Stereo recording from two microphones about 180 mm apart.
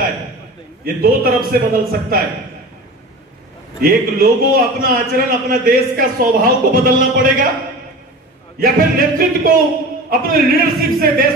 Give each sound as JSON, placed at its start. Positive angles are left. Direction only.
{"t": 0.8, "sound": "a man's voice", "side_deg": -55}
{"t": 3.8, "sound": "a man's voice", "side_deg": -55}
{"t": 8.5, "sound": "a man's voice", "side_deg": -55}